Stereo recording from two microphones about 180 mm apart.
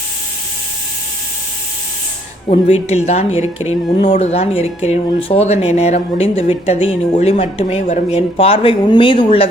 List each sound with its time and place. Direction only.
2.5 s speech: 40° left (ahead or behind)